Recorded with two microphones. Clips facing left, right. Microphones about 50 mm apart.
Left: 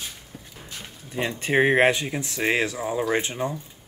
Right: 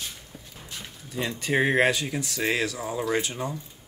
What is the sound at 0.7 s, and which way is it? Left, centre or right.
Speech, left.